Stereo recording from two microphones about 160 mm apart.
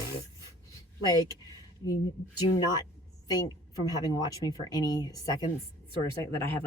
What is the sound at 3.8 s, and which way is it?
Speech, 25° left (ahead or behind).